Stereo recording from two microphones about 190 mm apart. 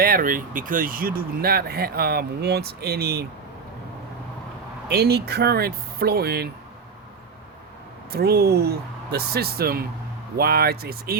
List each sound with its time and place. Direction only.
0.0 s speech: 50° right (ahead or behind)
4.9 s speech: 55° right (ahead or behind)
8.1 s speech: 55° right (ahead or behind)